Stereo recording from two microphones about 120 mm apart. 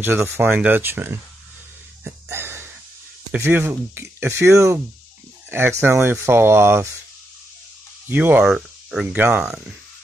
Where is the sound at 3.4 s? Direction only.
15° right (ahead or behind).